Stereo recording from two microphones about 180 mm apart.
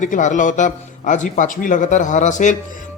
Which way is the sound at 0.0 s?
45° left (ahead or behind).